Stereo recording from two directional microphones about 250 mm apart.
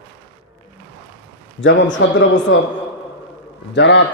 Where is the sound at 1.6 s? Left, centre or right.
Left.